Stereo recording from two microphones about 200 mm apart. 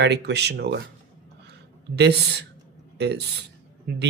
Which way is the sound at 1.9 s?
55° right (ahead or behind).